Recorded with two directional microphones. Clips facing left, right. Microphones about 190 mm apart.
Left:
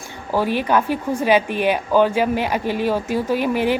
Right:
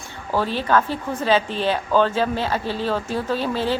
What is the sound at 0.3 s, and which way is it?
Speech, 15° left (ahead or behind).